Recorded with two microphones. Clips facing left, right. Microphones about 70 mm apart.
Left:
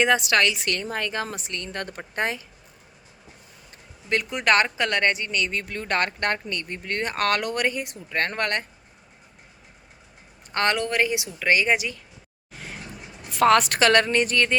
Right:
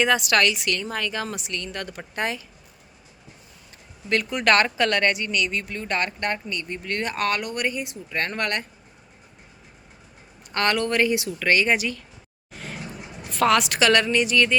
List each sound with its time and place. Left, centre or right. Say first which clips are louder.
0.0 s a woman's voice: even; left
0.6 s a woman's voice: right 1 dB; left
4.1 s speech: right 1 dB; centre; by 6.7 s left
6.8 s speech: even; left
7.2 s speech: left 3 dB; left
7.8 s speech: left 1 dB; left
10.5 s a woman's voice: right 1 dB; left
13.4 s speech: left 2 dB; left